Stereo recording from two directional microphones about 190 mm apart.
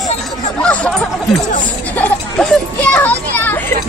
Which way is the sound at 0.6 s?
5° left (ahead or behind).